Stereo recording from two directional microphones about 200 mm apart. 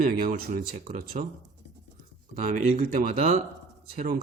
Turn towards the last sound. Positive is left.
turn(degrees=-45)  # may be behind; listen again after turning